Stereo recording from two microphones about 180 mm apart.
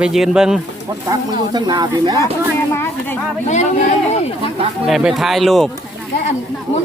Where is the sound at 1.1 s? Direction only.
20° right (ahead or behind).